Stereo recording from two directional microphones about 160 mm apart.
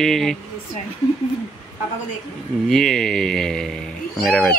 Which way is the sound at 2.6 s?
Centre (ahead or behind).